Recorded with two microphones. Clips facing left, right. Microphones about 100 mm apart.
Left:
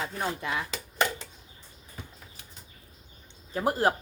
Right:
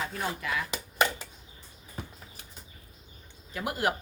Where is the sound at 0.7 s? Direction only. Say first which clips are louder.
Right 1 dB; 10° right (ahead or behind).